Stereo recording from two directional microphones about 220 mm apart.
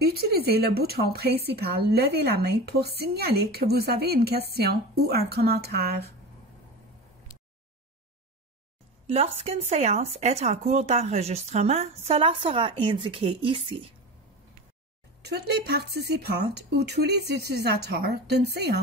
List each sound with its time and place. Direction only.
0.0 s speech: 45° right (ahead or behind)
9.0 s speech: 25° right (ahead or behind)
15.2 s speech: 50° right (ahead or behind)